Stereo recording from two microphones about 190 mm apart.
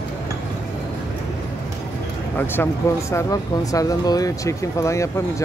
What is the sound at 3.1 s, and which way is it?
Speech, 15° left (ahead or behind).